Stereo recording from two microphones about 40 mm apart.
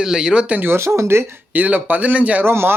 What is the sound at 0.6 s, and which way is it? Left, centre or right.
Speech, right.